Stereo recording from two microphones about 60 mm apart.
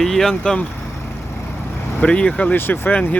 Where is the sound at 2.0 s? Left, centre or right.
Centre.